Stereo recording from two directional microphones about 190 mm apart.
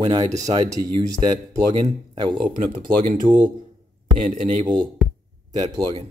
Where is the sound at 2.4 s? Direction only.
45° right (ahead or behind).